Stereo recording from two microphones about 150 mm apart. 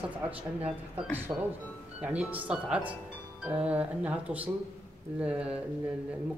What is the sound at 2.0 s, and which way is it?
Speech, 10° right (ahead or behind).